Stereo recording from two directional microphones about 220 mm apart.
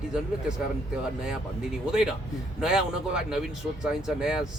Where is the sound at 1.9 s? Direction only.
5° right (ahead or behind).